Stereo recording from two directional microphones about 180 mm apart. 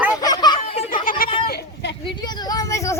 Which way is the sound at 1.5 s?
70° left (ahead or behind).